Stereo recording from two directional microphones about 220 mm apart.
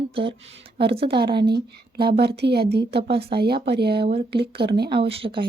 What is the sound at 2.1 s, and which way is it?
Speech, 50° right (ahead or behind).